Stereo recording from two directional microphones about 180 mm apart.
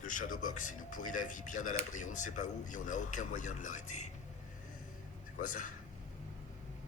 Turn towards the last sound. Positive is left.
turn(degrees=45)  # may be behind; listen again after turning